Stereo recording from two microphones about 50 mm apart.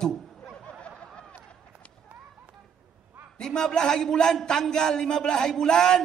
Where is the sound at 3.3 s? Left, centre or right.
Centre.